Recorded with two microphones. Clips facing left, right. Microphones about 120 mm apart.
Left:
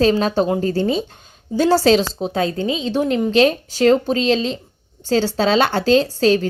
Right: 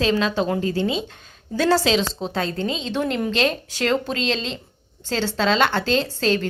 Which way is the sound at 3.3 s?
45° left (ahead or behind).